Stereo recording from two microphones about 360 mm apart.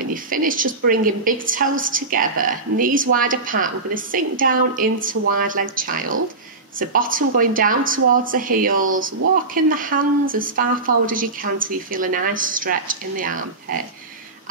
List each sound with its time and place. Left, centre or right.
0.1 s a woman's voice: right